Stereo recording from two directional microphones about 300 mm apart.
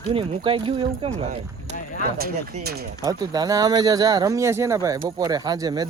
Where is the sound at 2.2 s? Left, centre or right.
Right.